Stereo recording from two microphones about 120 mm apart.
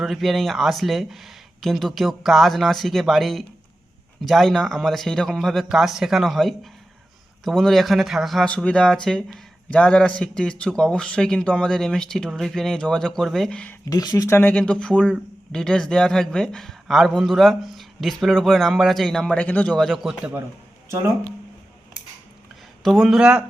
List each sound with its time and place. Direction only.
0.0 s a man's voice: centre (ahead or behind)
13.8 s speech: 30° left (ahead or behind)
14.3 s a man's voice: 15° left (ahead or behind); by 20.3 s 5° right (ahead or behind)
22.8 s a man's voice: centre (ahead or behind)